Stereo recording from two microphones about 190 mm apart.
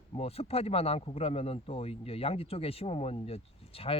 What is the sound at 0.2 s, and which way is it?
Speech, 30° left (ahead or behind).